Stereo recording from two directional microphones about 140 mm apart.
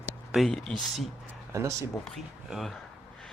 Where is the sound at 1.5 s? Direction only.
20° right (ahead or behind).